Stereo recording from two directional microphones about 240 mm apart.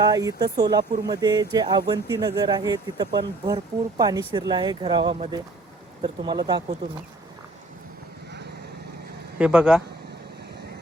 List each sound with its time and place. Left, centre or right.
0.0 s speech: centre
9.4 s speech: centre